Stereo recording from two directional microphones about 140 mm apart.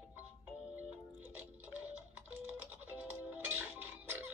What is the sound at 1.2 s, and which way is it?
Music, 10° right (ahead or behind).